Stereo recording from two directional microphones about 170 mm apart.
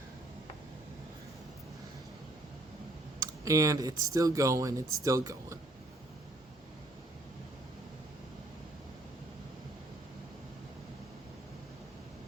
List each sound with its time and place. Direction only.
3.4 s speech: 20° right (ahead or behind)